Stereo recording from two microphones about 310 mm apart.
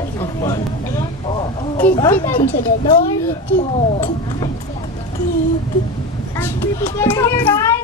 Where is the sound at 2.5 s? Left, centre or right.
Left.